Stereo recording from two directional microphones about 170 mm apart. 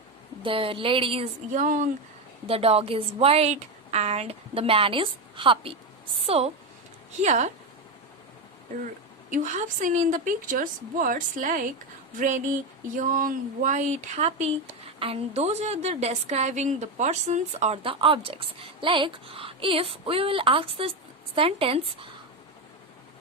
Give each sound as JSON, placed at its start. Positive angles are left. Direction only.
{"t": 0.4, "sound": "a woman's voice", "side_deg": -30}
{"t": 1.5, "sound": "a woman's voice", "side_deg": -50}
{"t": 2.5, "sound": "a woman's voice", "side_deg": -35}
{"t": 9.3, "sound": "a woman's voice", "side_deg": -45}